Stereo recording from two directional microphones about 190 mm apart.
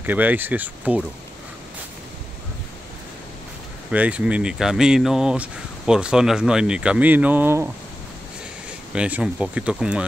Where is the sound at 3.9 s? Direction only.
5° right (ahead or behind).